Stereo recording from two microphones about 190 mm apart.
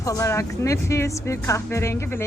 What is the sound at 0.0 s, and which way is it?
Speech, 15° left (ahead or behind).